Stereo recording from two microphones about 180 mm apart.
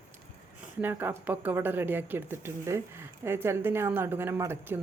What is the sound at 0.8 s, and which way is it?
A woman's voice, 10° right (ahead or behind).